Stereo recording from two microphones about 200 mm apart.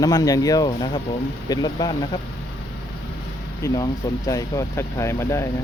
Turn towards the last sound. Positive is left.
turn(degrees=15)  # may be behind; listen again after turning